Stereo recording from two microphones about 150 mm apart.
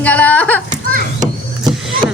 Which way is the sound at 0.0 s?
10° left (ahead or behind).